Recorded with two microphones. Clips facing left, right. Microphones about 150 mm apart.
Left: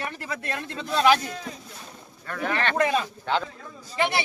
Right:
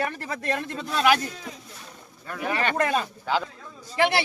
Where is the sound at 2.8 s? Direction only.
45° right (ahead or behind).